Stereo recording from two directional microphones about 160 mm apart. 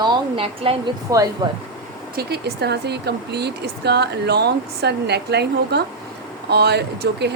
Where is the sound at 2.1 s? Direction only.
85° right.